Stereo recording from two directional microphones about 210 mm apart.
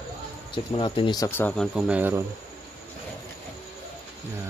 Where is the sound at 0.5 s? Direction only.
25° left (ahead or behind); by 1.6 s 10° left (ahead or behind).